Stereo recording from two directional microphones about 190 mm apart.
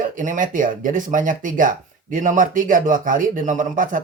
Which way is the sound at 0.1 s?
45° right (ahead or behind).